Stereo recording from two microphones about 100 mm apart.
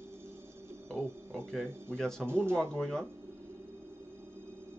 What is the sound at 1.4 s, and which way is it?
Speech, 10° left (ahead or behind).